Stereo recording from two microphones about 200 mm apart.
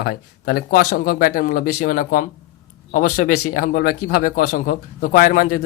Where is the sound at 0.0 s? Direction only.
50° left (ahead or behind).